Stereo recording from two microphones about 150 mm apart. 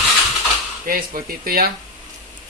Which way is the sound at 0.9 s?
75° right (ahead or behind).